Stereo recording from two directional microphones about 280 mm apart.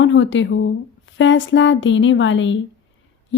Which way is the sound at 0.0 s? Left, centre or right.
Left.